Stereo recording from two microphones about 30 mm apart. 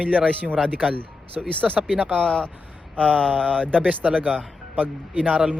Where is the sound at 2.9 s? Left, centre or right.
Left.